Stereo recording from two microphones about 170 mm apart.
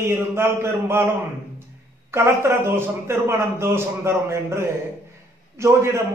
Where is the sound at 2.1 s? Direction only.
15° right (ahead or behind).